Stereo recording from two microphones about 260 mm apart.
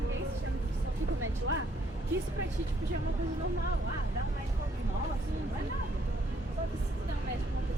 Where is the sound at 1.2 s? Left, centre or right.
Right.